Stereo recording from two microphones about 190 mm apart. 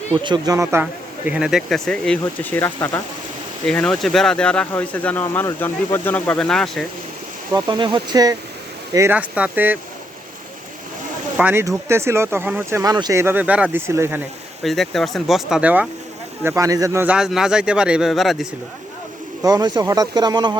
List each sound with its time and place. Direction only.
0.2 s speech: 20° right (ahead or behind)
1.3 s a man's voice: 5° right (ahead or behind)
7.5 s speech: 25° right (ahead or behind); by 9.7 s 10° right (ahead or behind)
11.3 s speech: 10° right (ahead or behind)
14.6 s a man's voice: centre (ahead or behind)
19.4 s speech: 20° right (ahead or behind)